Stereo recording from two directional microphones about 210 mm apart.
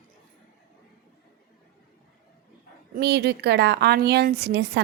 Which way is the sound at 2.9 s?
50° right (ahead or behind).